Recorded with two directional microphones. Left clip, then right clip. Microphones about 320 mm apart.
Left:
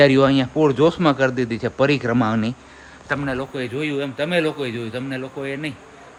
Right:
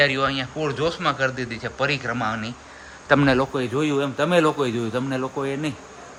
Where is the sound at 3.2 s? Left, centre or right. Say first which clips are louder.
Right 6 dB; right.